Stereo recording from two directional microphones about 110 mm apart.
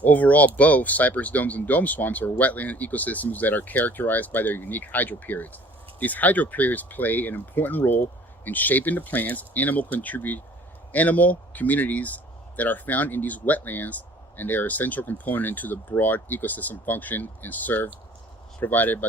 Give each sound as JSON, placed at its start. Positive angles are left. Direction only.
{"t": 0.0, "sound": "speech", "side_deg": 15}